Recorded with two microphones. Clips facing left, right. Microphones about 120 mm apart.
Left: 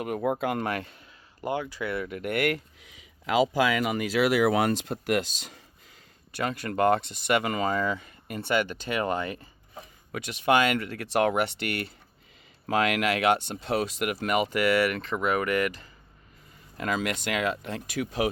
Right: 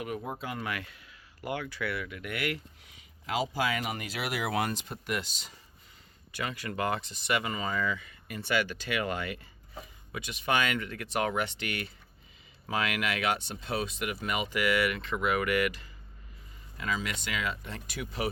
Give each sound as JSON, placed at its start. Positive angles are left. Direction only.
{"t": 0.2, "sound": "speech", "side_deg": 70}
{"t": 0.7, "sound": "speech", "side_deg": 35}
{"t": 2.0, "sound": "speech", "side_deg": 45}
{"t": 3.2, "sound": "speech", "side_deg": 90}
{"t": 6.4, "sound": "speech", "side_deg": 45}
{"t": 7.4, "sound": "speech", "side_deg": 60}
{"t": 7.7, "sound": "speech", "side_deg": 40}
{"t": 9.0, "sound": "speech", "side_deg": 35}
{"t": 10.1, "sound": "speech", "side_deg": 45}
{"t": 16.7, "sound": "speech", "side_deg": 50}